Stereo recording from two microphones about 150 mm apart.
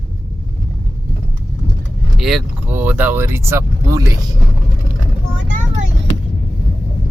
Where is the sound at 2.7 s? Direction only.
15° right (ahead or behind).